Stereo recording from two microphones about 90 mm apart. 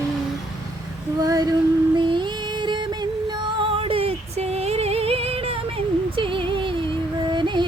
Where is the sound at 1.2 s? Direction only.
45° right (ahead or behind).